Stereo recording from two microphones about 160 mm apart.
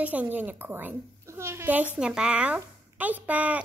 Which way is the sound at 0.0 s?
10° right (ahead or behind).